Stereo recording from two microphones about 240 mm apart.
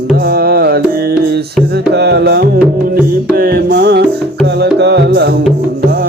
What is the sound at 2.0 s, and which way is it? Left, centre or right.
Music, right.